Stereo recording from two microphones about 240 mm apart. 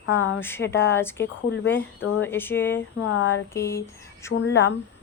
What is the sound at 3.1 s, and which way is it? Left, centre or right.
Speech, left.